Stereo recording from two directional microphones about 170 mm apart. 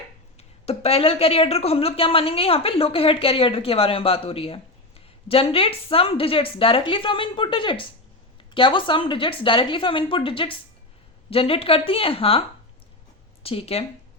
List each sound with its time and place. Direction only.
0.3 s speech: 35° left (ahead or behind)